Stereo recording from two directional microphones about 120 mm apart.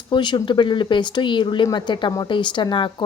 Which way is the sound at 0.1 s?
40° left (ahead or behind).